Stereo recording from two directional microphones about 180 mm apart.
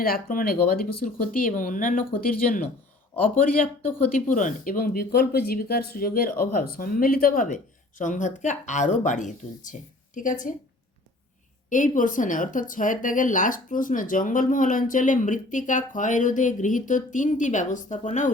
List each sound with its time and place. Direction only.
0.0 s speech: 55° left (ahead or behind)
3.8 s speech: 10° left (ahead or behind)
4.3 s speech: 45° left (ahead or behind)
11.7 s speech: 45° left (ahead or behind)